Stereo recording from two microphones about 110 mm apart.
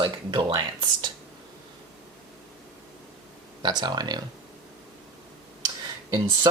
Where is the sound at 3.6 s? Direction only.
40° right (ahead or behind).